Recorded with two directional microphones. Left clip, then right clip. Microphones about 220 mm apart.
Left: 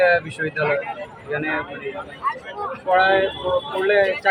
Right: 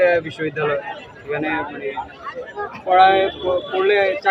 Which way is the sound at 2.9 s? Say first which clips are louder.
Right 4 dB; centre (ahead or behind).